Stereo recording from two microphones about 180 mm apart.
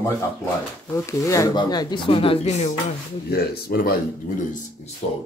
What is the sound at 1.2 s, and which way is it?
Speech, 20° left (ahead or behind).